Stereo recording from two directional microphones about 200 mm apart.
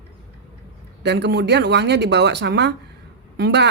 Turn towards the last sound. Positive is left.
turn(degrees=-55)  # may be behind; listen again after turning